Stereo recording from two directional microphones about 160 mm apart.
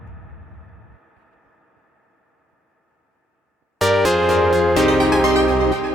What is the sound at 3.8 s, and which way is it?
Music, centre (ahead or behind).